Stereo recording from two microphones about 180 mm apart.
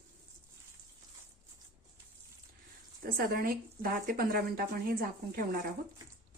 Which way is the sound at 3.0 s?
55° right (ahead or behind).